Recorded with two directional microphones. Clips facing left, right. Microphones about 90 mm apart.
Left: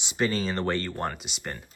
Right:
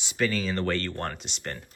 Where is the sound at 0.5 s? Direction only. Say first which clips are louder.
Even; 20° left (ahead or behind).